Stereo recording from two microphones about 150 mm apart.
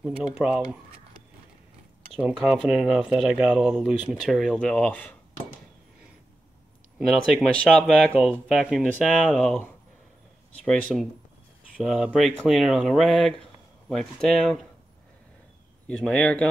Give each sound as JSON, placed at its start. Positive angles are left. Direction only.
{"t": 0.4, "sound": "speech", "side_deg": -5}
{"t": 2.2, "sound": "speech", "side_deg": 0}
{"t": 7.1, "sound": "speech", "side_deg": 0}
{"t": 10.6, "sound": "speech", "side_deg": 0}
{"t": 16.0, "sound": "speech", "side_deg": 5}